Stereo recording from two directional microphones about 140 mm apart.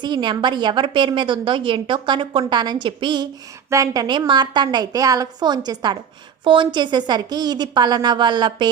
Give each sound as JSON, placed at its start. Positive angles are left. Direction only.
{"t": 0.0, "sound": "a woman's voice", "side_deg": -30}
{"t": 3.7, "sound": "a woman's voice", "side_deg": -25}